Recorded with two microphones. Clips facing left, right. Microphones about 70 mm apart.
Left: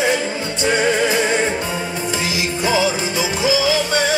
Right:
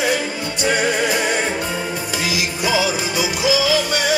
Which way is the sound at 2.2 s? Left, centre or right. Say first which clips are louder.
Even; left.